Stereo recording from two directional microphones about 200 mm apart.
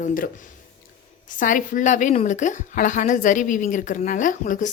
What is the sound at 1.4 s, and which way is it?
A woman's voice, 40° left (ahead or behind).